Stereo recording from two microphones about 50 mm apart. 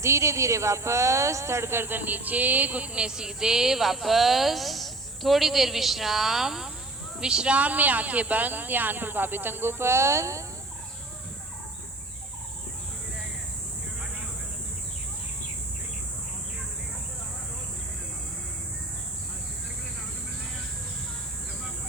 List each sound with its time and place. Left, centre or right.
0.0 s speech: right